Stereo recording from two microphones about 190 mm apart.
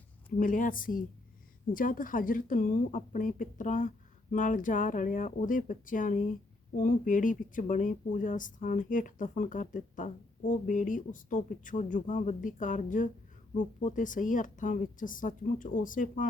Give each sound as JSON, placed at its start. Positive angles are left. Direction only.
{"t": 0.3, "sound": "speech", "side_deg": 45}